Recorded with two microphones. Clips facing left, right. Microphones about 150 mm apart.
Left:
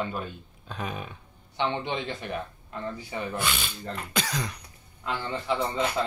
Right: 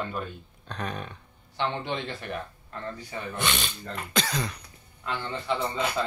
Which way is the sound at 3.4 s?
5° left (ahead or behind).